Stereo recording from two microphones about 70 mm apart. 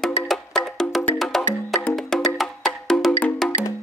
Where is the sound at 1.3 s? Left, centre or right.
Centre.